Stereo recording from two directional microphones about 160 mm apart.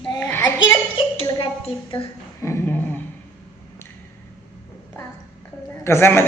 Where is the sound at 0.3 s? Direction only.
15° left (ahead or behind).